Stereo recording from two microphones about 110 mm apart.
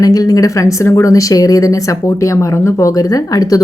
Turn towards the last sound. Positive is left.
turn(degrees=35)  # may be behind; listen again after turning